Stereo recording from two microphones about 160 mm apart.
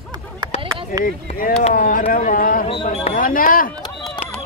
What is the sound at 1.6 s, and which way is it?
Speech, 55° left (ahead or behind).